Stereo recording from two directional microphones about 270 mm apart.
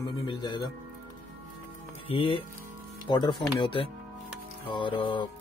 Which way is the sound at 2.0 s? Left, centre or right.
Centre.